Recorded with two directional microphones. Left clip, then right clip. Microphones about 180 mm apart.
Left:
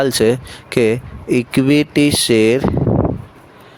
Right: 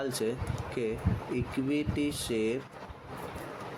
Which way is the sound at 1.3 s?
65° left (ahead or behind).